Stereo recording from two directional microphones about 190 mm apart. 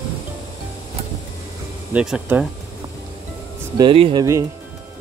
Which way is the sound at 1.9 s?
5° right (ahead or behind).